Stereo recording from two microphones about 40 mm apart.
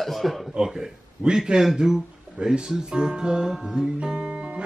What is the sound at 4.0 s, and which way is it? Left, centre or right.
Music, right.